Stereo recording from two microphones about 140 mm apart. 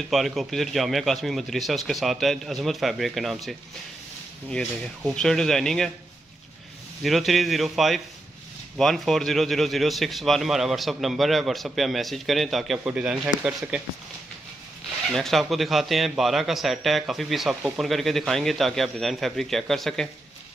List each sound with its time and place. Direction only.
0.1 s a man's voice: centre (ahead or behind)
7.0 s a man's voice: centre (ahead or behind)
15.0 s a man's voice: centre (ahead or behind)